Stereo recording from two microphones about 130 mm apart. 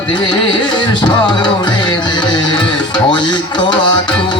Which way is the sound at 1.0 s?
35° left (ahead or behind).